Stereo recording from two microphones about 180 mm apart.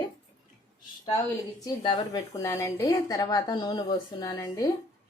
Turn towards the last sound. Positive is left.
turn(degrees=20)  # may be behind; listen again after turning